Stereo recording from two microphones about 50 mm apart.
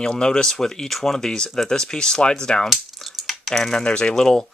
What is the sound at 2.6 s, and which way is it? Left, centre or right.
Speech, centre.